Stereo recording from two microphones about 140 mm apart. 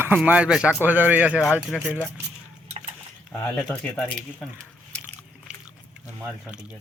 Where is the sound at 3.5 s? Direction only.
10° left (ahead or behind).